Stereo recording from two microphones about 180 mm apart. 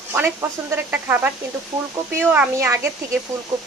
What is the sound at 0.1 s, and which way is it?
Speech, 10° right (ahead or behind).